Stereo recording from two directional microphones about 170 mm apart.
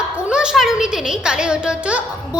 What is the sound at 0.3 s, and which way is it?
A woman's voice, 5° right (ahead or behind).